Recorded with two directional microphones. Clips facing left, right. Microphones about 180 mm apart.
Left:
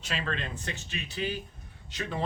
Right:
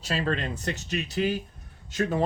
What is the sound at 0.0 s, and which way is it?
Speech, 40° right (ahead or behind).